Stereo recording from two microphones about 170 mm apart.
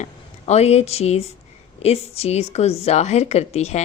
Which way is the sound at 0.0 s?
40° left (ahead or behind).